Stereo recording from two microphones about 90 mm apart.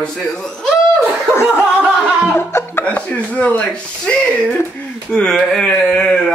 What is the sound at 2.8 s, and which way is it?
Speech, 15° left (ahead or behind).